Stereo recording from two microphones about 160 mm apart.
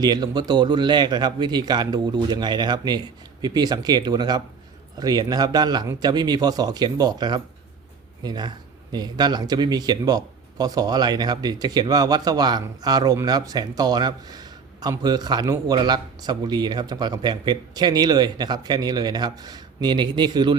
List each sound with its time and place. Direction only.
0.0 s speech: 25° right (ahead or behind)